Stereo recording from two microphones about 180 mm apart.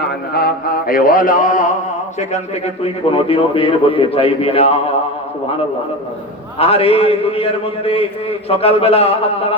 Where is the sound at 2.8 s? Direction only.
30° left (ahead or behind).